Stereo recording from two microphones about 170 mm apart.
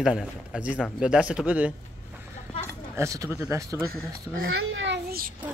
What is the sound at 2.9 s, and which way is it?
Speech, 20° right (ahead or behind).